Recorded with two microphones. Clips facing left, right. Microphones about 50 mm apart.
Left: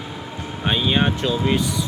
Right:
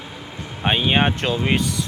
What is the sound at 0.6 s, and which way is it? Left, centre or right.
Speech, right.